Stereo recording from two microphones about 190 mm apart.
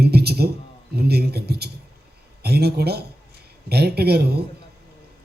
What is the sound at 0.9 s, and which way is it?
A man's voice, 55° right (ahead or behind).